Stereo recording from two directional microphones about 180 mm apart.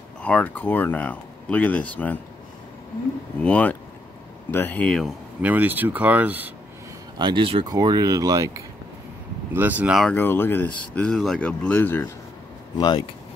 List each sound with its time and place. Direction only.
0.2 s speech: 10° left (ahead or behind)
3.3 s speech: 5° left (ahead or behind); by 6.5 s 10° right (ahead or behind)
7.2 s speech: 25° right (ahead or behind); by 10.1 s 5° right (ahead or behind)
10.1 s speech: 10° left (ahead or behind)
12.7 s speech: 25° left (ahead or behind)